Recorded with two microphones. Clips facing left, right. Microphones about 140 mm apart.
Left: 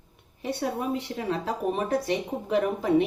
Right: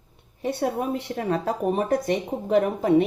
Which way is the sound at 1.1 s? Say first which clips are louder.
Right 4 dB; 50° right (ahead or behind).